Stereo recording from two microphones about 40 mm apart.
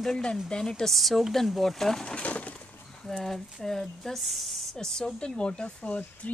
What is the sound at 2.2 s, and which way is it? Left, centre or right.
Breaking, left.